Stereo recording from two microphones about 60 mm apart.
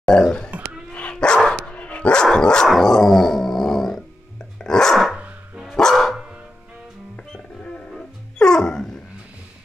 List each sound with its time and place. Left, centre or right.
0.0 s a sound: centre
1.1 s dog: centre
1.6 s dog: left
7.3 s music: centre